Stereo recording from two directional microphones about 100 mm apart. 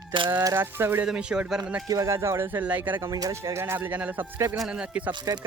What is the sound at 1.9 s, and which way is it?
Speech, 35° right (ahead or behind).